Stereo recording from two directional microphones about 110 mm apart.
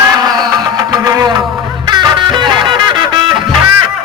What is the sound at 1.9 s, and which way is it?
Music, 40° right (ahead or behind).